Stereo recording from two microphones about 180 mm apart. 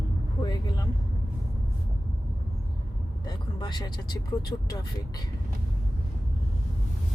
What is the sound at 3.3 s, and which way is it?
Speech, 25° left (ahead or behind).